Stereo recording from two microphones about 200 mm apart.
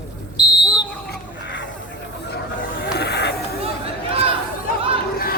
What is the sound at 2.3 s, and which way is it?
Hiss, 60° left (ahead or behind).